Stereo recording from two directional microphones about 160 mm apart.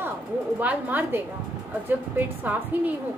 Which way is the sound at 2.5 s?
10° right (ahead or behind).